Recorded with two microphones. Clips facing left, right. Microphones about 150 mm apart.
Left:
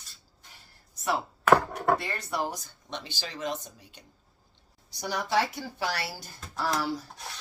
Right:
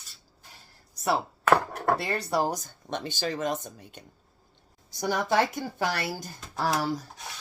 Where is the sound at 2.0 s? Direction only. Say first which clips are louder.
Right 5 dB; 35° right (ahead or behind).